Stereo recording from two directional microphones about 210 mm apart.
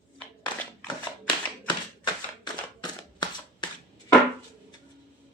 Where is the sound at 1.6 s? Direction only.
20° left (ahead or behind).